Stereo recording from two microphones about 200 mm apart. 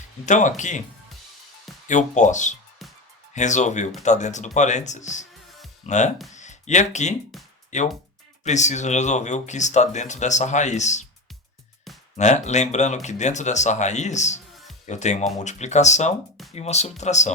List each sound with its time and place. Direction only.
0.3 s speech: 40° left (ahead or behind)
1.9 s speech: 35° left (ahead or behind)
12.1 s speech: 35° left (ahead or behind)